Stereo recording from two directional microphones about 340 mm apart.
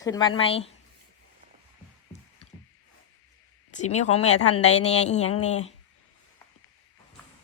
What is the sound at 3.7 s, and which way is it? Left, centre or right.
Speech, centre.